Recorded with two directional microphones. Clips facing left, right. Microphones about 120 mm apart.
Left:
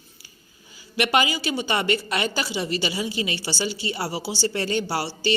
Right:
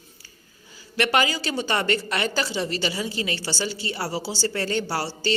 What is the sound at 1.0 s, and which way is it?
A woman's voice, 15° left (ahead or behind).